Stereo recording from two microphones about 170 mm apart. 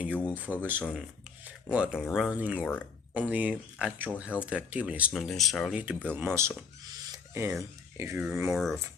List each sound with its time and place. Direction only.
0.0 s speech: 10° right (ahead or behind)
6.1 s speech: 10° right (ahead or behind)